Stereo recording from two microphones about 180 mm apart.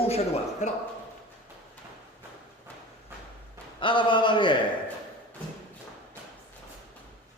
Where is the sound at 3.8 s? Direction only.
25° left (ahead or behind).